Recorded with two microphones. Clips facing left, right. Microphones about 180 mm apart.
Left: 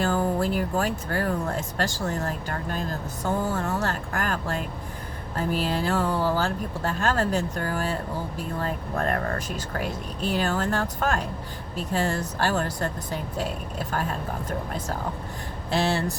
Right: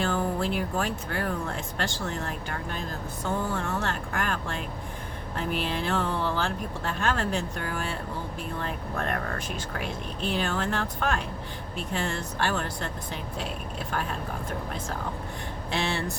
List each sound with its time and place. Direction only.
0.0 s speech: 40° left (ahead or behind)
15.7 s speech: 35° left (ahead or behind)